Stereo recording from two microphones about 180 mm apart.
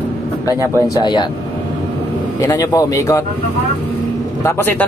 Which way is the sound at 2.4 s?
20° left (ahead or behind).